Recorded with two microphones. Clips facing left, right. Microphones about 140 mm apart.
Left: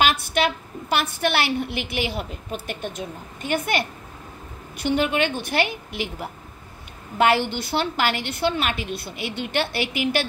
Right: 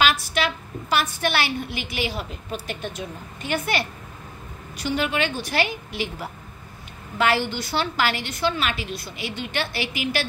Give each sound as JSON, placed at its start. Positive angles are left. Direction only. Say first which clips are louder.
{"t": 0.0, "sound": "a woman's voice", "louder": "left 1 dB", "side_deg": 55}
{"t": 4.7, "sound": "a woman's voice", "louder": "left 3 dB", "side_deg": 50}
{"t": 7.2, "sound": "a woman's voice", "louder": "left 2 dB", "side_deg": 55}